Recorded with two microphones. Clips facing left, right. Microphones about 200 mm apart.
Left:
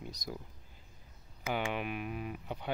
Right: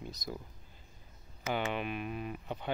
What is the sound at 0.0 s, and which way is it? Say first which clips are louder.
Speech: right 1 dB; 10° left (ahead or behind).